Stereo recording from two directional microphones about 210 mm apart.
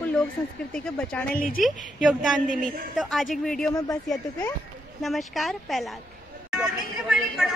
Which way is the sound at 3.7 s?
15° left (ahead or behind).